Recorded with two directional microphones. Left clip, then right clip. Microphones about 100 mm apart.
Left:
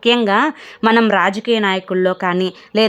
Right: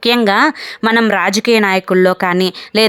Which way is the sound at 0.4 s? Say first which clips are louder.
Right 2 dB; 5° right (ahead or behind).